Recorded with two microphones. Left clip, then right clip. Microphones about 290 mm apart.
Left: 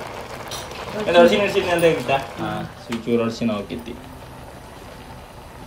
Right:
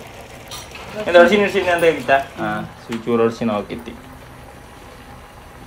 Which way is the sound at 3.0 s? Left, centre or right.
Centre.